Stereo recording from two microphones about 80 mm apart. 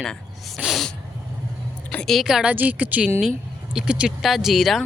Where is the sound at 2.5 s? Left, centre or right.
Centre.